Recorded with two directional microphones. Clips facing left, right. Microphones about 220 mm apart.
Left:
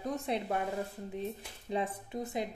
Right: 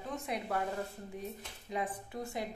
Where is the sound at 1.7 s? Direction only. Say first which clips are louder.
Left 3 dB; 30° left (ahead or behind).